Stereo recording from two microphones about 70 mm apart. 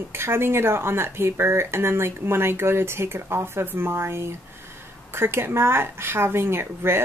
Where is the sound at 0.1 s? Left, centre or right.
Right.